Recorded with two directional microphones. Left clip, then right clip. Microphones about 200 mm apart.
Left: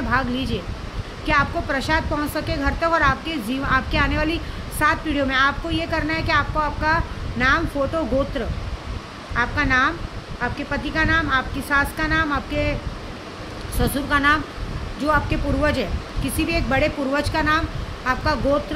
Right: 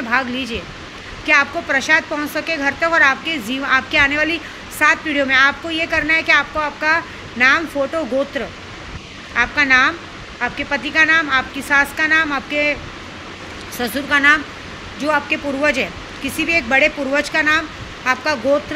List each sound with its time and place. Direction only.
0.1 s a woman's voice: 15° left (ahead or behind)
9.3 s a woman's voice: 10° left (ahead or behind)
13.7 s a woman's voice: 15° left (ahead or behind)